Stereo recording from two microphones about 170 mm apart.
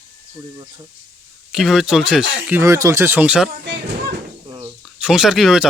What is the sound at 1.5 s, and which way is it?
Speech, centre (ahead or behind).